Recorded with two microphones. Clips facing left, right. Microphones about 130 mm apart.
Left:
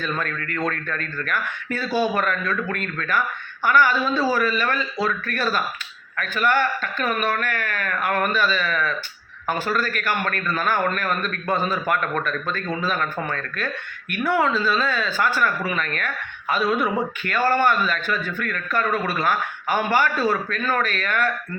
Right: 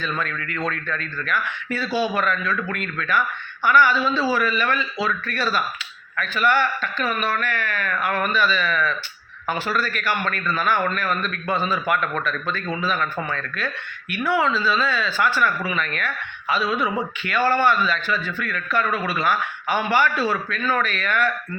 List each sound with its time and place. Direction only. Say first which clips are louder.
0.0 s a woman's voice: even; 45° left (ahead or behind)
14.1 s a woman's voice: even; 45° left (ahead or behind)